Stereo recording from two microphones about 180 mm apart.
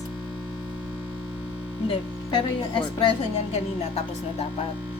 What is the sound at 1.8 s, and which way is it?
Speech, 25° left (ahead or behind).